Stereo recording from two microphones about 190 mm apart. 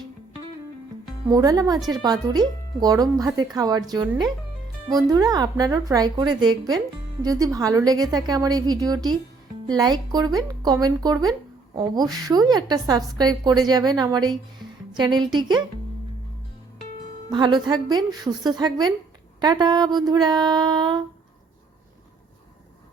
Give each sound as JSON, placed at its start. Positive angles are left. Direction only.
{"t": 1.3, "sound": "speech", "side_deg": -20}
{"t": 5.1, "sound": "speech", "side_deg": -20}
{"t": 17.2, "sound": "speech", "side_deg": -25}